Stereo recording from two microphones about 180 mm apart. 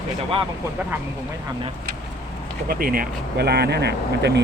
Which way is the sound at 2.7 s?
55° right (ahead or behind).